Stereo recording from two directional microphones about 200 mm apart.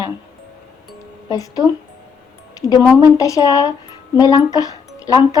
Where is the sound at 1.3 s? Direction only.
15° left (ahead or behind).